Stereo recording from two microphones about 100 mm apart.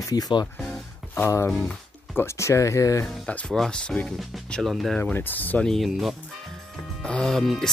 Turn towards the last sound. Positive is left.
turn(degrees=0)  # may be behind; listen again after turning